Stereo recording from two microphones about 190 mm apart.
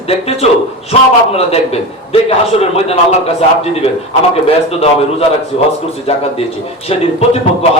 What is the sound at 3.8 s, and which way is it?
A man's voice, 35° left (ahead or behind).